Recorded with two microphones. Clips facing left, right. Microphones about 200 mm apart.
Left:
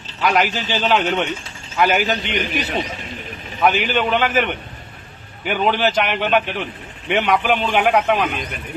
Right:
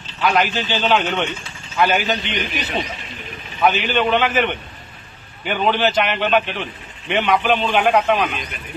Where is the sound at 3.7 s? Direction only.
10° left (ahead or behind).